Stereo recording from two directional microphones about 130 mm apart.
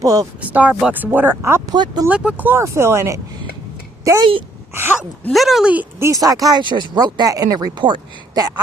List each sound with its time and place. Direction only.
0.0 s speech: 25° right (ahead or behind)
0.5 s speech: 10° right (ahead or behind)
1.7 s speech: 35° right (ahead or behind)
2.0 s speech: 10° right (ahead or behind); by 4.3 s 25° right (ahead or behind)
4.7 s gasp: 15° right (ahead or behind)
5.3 s speech: centre (ahead or behind)
5.7 s speech: 20° right (ahead or behind)